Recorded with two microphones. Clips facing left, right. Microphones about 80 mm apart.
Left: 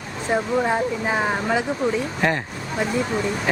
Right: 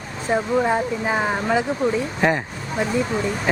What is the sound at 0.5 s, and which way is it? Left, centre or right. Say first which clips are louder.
Speech: right 2 dB; centre.